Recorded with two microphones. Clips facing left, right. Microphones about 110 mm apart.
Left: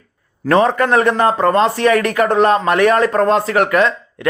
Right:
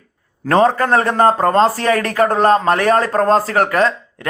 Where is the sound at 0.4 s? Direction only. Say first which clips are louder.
Even; 35° right (ahead or behind).